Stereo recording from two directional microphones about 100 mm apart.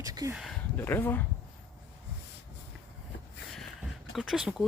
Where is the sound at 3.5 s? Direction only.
Centre (ahead or behind).